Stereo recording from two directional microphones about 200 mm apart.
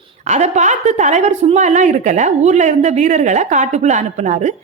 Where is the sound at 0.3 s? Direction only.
35° right (ahead or behind).